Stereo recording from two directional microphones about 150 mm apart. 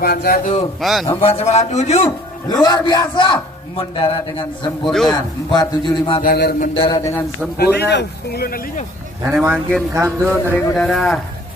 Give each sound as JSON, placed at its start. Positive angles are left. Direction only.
{"t": 0.0, "sound": "a man's voice", "side_deg": 90}
{"t": 0.7, "sound": "speech", "side_deg": 0}
{"t": 1.2, "sound": "a man's voice", "side_deg": 40}
{"t": 2.6, "sound": "a man's voice", "side_deg": 25}
{"t": 6.2, "sound": "a sound", "side_deg": 80}
{"t": 6.7, "sound": "a man's voice", "side_deg": 35}
{"t": 7.0, "sound": "a man's voice", "side_deg": 20}
{"t": 7.5, "sound": "a man's voice", "side_deg": 90}
{"t": 9.2, "sound": "a man's voice", "side_deg": -15}
{"t": 10.3, "sound": "speech", "side_deg": 10}